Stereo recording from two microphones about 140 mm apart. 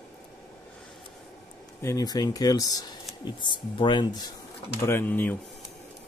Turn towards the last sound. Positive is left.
turn(degrees=15)  # may be behind; listen again after turning